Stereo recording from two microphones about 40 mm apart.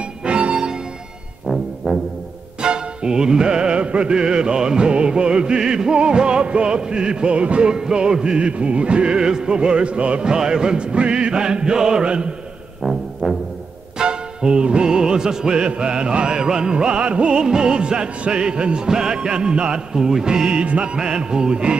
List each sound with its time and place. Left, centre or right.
0.2 s music: right
1.8 s music: centre
2.6 s music: right
10.2 s music: centre
12.8 s music: centre
13.9 s music: right